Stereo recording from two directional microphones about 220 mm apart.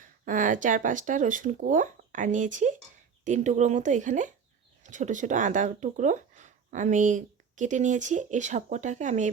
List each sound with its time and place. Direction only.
0.0 s speech: 35° right (ahead or behind)